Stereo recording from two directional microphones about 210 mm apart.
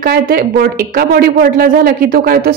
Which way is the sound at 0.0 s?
45° right (ahead or behind).